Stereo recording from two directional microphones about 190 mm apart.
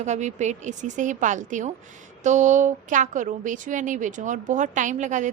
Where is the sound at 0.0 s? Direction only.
40° right (ahead or behind).